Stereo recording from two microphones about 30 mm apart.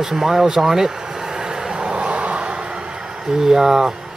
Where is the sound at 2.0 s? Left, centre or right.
Right.